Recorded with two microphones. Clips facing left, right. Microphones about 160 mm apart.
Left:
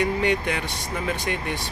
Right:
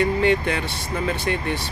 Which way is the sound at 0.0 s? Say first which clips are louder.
Right 3 dB; 15° left (ahead or behind).